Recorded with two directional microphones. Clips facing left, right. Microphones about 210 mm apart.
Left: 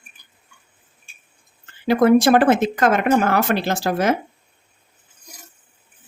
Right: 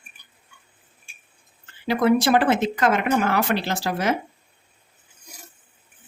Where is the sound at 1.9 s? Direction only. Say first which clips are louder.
Left 5 dB; 50° left (ahead or behind).